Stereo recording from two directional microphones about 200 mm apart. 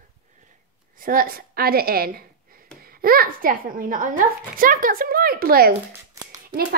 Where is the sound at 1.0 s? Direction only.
45° right (ahead or behind).